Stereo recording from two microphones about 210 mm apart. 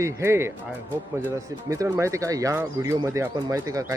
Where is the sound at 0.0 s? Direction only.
10° right (ahead or behind).